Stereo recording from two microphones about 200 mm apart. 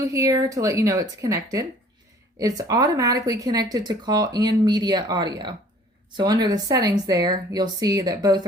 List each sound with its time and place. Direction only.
0.1 s speech: 15° right (ahead or behind)